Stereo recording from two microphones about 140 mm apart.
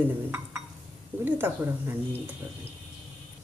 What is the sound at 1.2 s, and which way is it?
Speech, 15° right (ahead or behind).